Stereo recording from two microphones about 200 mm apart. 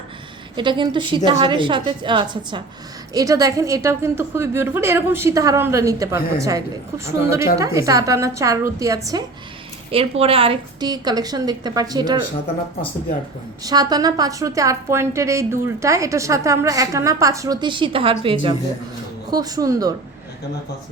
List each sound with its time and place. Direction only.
0.5 s a woman's voice: 25° right (ahead or behind)
9.9 s a woman's voice: 30° right (ahead or behind)
13.7 s a woman's voice: 20° right (ahead or behind)